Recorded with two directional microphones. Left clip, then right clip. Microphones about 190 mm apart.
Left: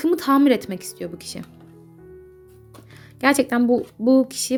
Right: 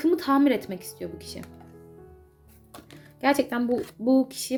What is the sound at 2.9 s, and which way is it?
Speech, 40° left (ahead or behind).